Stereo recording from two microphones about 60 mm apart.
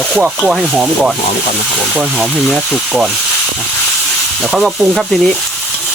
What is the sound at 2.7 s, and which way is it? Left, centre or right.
Speech, centre.